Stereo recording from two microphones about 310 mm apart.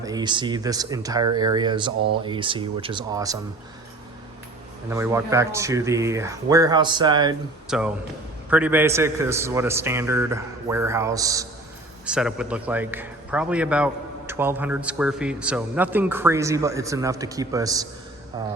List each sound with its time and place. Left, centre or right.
0.0 s speech: centre
4.9 s speech: centre
7.7 s a man's voice: centre